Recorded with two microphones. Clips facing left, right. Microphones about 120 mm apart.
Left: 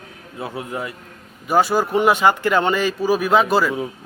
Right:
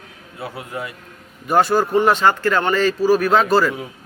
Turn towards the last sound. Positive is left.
turn(degrees=10)  # may be behind; listen again after turning